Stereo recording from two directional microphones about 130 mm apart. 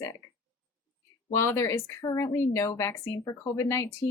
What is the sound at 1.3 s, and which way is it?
Speech, 20° left (ahead or behind).